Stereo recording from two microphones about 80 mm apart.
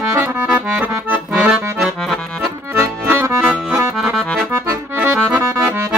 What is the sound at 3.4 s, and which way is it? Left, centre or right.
Accordion, centre.